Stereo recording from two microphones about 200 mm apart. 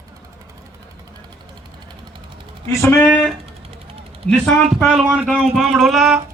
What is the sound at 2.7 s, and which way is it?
Speech, 10° left (ahead or behind).